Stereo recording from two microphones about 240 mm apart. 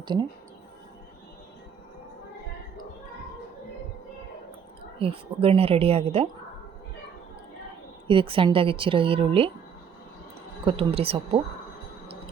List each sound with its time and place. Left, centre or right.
0.0 s speech: centre
4.9 s speech: right
8.0 s speech: right
10.7 s speech: right